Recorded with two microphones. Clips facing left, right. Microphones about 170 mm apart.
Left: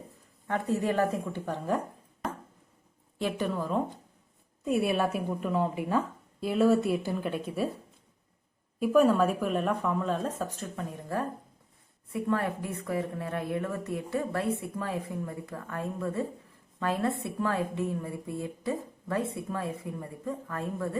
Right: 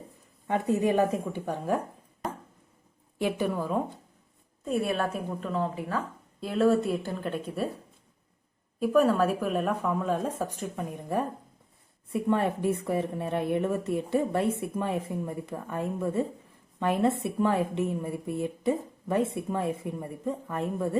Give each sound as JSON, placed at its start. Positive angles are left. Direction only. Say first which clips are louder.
{"t": 0.4, "sound": "a woman's voice", "louder": "right 3 dB", "side_deg": -15}
{"t": 3.2, "sound": "a woman's voice", "louder": "right 2 dB", "side_deg": -10}
{"t": 4.6, "sound": "a woman's voice", "louder": "left 1 dB", "side_deg": 5}
{"t": 6.4, "sound": "a woman's voice", "louder": "even", "side_deg": 0}
{"t": 8.8, "sound": "a woman's voice", "louder": "even", "side_deg": 0}